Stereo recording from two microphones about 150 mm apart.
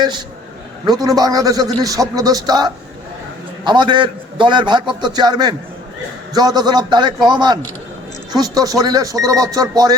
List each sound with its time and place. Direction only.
0.9 s a man's voice: 25° right (ahead or behind)